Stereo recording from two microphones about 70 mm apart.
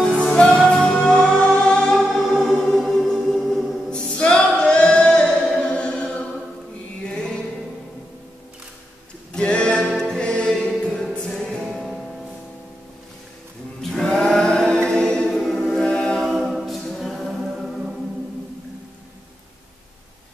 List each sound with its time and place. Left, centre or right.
0.0 s music: centre
2.0 s choir: centre
3.9 s choir: centre
7.1 s music: centre
9.3 s music: centre
13.7 s a capella: centre
16.2 s a capella: centre